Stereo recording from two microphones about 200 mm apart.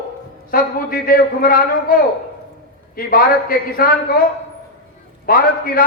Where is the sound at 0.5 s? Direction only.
45° left (ahead or behind).